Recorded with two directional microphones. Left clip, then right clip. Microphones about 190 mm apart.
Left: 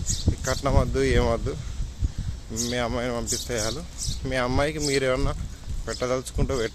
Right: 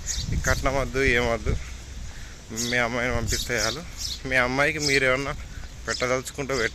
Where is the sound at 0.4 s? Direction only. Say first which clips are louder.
Right 1 dB; 20° left (ahead or behind).